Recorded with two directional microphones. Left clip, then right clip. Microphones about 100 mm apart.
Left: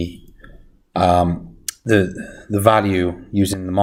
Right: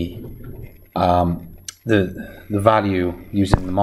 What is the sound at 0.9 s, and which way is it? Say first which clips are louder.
Speech: left 2 dB; 20° left (ahead or behind).